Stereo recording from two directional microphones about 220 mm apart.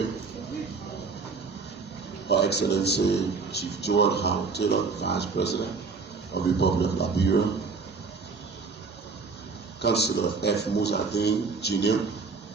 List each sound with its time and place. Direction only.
2.3 s a man's voice: 50° left (ahead or behind)
9.8 s a man's voice: 50° left (ahead or behind)